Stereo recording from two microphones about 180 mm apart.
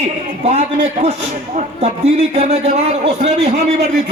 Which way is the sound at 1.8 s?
35° right (ahead or behind).